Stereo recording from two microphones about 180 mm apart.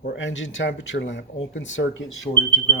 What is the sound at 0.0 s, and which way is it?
Speech, 75° left (ahead or behind).